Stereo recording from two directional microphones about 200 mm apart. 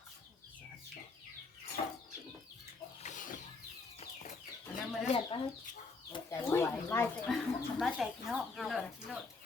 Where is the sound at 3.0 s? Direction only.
40° left (ahead or behind).